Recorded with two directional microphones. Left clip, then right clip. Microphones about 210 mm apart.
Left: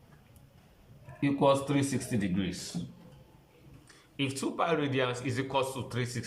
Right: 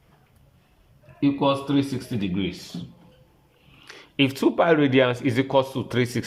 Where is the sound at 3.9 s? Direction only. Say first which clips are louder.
Right 12 dB; 40° right (ahead or behind).